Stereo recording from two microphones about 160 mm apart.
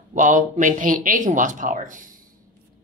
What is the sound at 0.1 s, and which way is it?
Speech, 50° right (ahead or behind).